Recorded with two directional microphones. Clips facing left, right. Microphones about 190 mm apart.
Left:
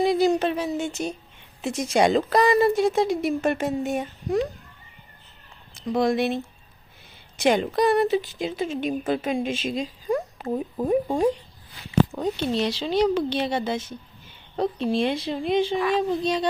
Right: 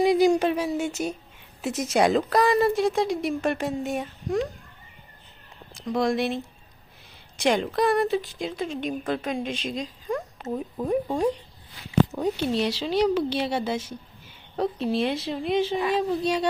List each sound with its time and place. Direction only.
0.0 s a woman's voice: 15° right (ahead or behind)
5.7 s a woman's voice: centre (ahead or behind)
10.5 s speech: 20° left (ahead or behind)
11.9 s a woman's voice: 5° right (ahead or behind)